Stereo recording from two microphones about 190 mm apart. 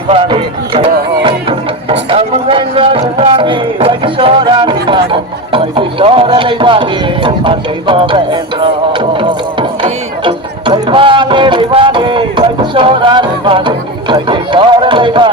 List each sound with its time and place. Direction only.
0.1 s music: 30° right (ahead or behind)